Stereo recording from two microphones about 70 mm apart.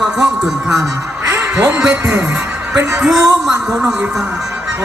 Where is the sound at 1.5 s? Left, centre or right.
Right.